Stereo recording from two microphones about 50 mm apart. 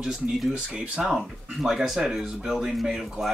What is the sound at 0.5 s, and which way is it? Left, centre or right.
Speech, centre.